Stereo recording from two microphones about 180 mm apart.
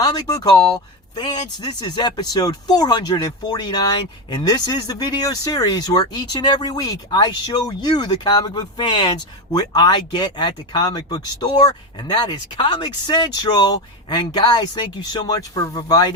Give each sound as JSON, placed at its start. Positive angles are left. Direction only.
{"t": 0.0, "sound": "speech", "side_deg": 20}